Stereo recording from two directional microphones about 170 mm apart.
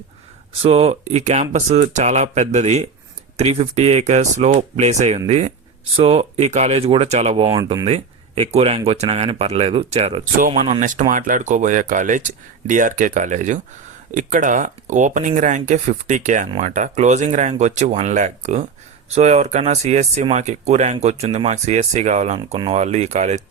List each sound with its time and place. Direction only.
0.6 s speech: 35° right (ahead or behind)
22.5 s speech: 30° right (ahead or behind)
22.8 s speech: 40° right (ahead or behind)